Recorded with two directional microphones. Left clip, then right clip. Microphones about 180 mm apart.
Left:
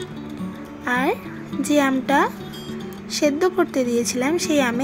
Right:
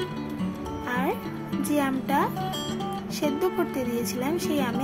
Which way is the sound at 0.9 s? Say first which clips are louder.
Left 7 dB; 30° left (ahead or behind).